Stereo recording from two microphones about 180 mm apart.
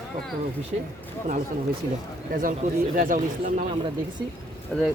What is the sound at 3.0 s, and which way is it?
Speech, 45° right (ahead or behind).